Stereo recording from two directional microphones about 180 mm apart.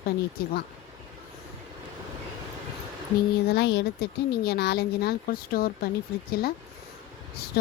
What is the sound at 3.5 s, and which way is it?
Speech, 70° left (ahead or behind).